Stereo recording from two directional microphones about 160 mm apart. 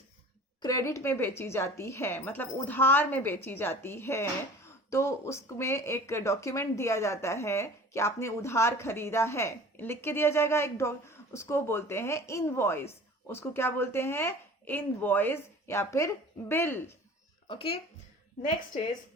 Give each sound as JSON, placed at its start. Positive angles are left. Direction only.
{"t": 0.6, "sound": "a woman's voice", "side_deg": 20}
{"t": 17.5, "sound": "speech", "side_deg": 35}